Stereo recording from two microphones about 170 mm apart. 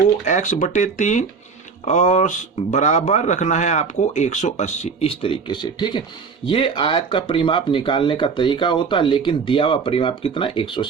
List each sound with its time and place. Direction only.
0.3 s speech: 45° left (ahead or behind); by 10.8 s 30° left (ahead or behind)